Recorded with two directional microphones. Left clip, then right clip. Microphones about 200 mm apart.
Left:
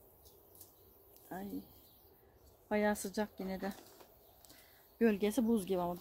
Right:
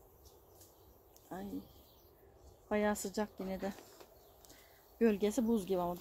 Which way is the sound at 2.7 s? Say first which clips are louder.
Even; 15° left (ahead or behind).